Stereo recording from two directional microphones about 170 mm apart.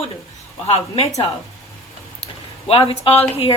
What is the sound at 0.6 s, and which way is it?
Speech, 35° left (ahead or behind).